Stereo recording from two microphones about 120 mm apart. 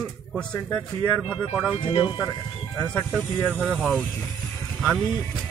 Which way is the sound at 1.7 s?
45° left (ahead or behind).